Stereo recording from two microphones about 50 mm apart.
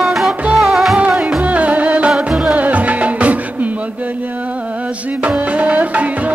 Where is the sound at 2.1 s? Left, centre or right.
Centre.